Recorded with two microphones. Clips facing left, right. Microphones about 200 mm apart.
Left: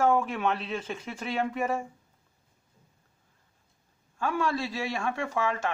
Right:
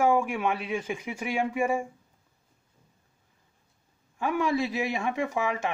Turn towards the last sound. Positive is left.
turn(degrees=-15)  # may be behind; listen again after turning